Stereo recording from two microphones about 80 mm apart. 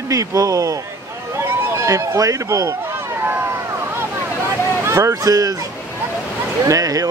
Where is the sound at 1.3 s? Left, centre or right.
Right.